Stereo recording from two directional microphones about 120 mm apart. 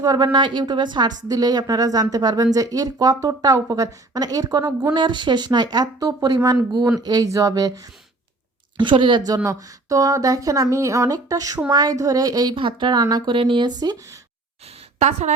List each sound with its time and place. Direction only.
0.0 s a woman's voice: 35° right (ahead or behind)
8.8 s a woman's voice: 45° right (ahead or behind)
12.5 s a woman's voice: 40° right (ahead or behind)
14.9 s a woman's voice: 70° right (ahead or behind)